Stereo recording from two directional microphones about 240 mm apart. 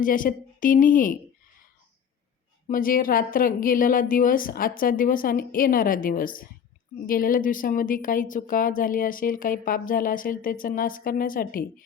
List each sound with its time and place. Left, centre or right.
0.0 s a woman's voice: left
2.6 s a woman's voice: left